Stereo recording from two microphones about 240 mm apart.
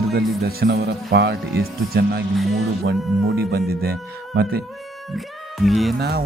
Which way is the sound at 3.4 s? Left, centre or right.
Right.